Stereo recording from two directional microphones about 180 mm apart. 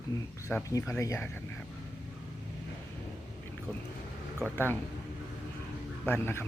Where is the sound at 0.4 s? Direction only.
15° left (ahead or behind).